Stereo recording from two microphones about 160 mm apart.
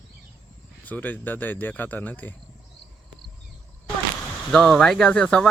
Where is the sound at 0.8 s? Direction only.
10° left (ahead or behind).